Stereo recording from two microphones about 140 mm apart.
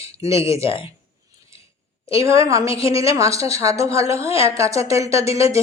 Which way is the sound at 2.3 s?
25° right (ahead or behind).